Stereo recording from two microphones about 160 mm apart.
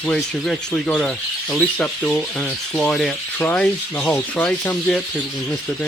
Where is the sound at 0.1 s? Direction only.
5° left (ahead or behind).